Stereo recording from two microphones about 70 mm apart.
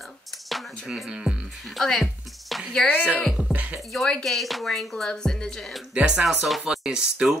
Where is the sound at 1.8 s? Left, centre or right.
Centre.